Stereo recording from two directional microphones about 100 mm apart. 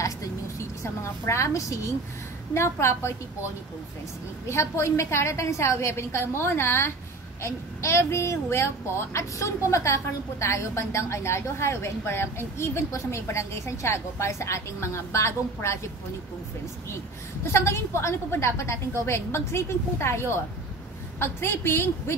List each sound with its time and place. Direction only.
1.0 s a woman's voice: 30° left (ahead or behind)
4.5 s a woman's voice: 30° left (ahead or behind)
17.4 s a woman's voice: 25° left (ahead or behind)